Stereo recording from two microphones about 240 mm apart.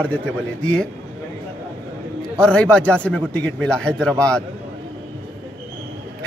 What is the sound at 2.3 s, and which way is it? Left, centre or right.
A man's voice, centre.